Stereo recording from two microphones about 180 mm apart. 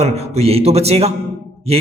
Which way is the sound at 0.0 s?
35° right (ahead or behind).